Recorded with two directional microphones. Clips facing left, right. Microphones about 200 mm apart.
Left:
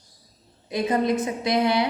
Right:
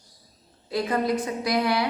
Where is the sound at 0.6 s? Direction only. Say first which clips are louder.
Left 2 dB; 20° left (ahead or behind).